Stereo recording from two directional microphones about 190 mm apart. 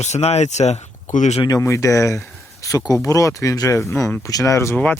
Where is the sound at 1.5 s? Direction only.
15° left (ahead or behind).